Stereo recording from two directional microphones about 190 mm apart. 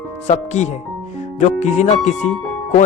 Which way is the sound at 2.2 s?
35° left (ahead or behind).